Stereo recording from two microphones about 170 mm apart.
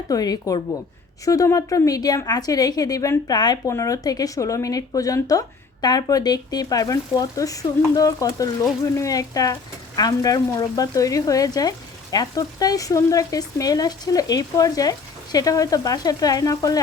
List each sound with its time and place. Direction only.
0.1 s a woman's voice: 20° left (ahead or behind)